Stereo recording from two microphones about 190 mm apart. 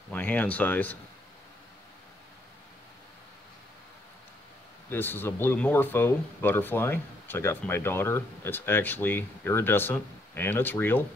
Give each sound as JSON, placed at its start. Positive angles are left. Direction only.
{"t": 0.1, "sound": "speech", "side_deg": 10}
{"t": 4.8, "sound": "speech", "side_deg": 10}